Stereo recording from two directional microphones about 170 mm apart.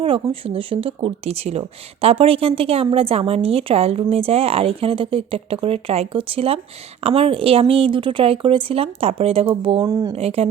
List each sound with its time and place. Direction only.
0.0 s speech: 30° right (ahead or behind)
9.8 s speech: 25° right (ahead or behind)
10.2 s speech: 35° right (ahead or behind)